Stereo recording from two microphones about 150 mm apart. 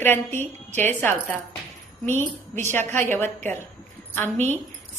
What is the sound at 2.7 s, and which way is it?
A woman's voice, 15° left (ahead or behind).